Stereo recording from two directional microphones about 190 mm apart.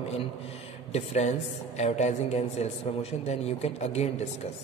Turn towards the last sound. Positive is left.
turn(degrees=35)  # may be behind; listen again after turning